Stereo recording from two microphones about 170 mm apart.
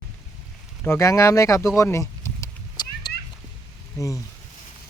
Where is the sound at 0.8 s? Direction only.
15° left (ahead or behind).